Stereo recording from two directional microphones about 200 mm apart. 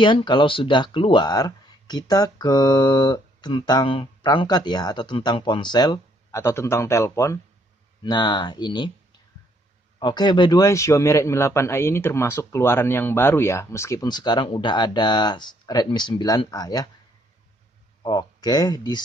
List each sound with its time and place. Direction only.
0.0 s speech: 25° left (ahead or behind)
9.9 s speech: 20° left (ahead or behind)
18.0 s speech: 20° left (ahead or behind)